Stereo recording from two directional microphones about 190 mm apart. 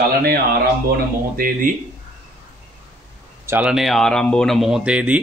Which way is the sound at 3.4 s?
5° right (ahead or behind).